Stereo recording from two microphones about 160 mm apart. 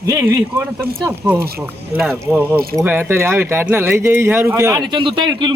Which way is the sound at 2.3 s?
10° right (ahead or behind).